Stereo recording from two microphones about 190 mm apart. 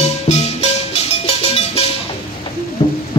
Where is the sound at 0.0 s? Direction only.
35° left (ahead or behind).